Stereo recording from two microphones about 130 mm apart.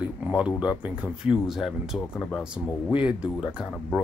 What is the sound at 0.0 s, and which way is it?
Speech, 10° right (ahead or behind).